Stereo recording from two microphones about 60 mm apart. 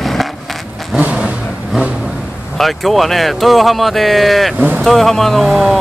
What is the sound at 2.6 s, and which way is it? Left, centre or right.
Speech, centre.